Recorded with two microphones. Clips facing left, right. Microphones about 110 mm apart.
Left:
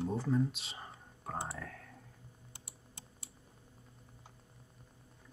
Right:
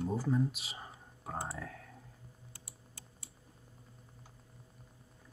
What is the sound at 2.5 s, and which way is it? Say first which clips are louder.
Computer keyboard: left 1 dB; 20° left (ahead or behind).